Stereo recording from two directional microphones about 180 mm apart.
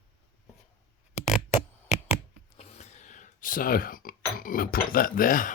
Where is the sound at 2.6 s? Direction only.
35° left (ahead or behind).